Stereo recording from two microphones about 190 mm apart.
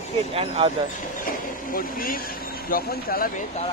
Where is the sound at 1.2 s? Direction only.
50° left (ahead or behind).